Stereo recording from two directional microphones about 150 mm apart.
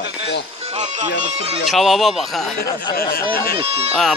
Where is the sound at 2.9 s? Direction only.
90° left.